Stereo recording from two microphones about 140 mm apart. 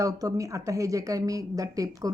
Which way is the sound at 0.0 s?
25° right (ahead or behind).